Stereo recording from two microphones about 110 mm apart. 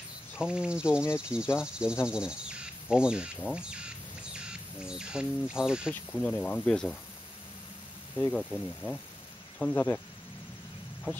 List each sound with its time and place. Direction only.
0.4 s speech: 10° right (ahead or behind)
6.1 s speech: 10° left (ahead or behind)
8.3 s speech: 5° left (ahead or behind)
9.6 s speech: 15° left (ahead or behind)